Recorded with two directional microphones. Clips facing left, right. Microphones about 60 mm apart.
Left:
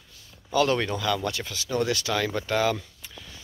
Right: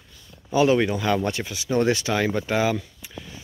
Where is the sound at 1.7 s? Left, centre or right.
Right.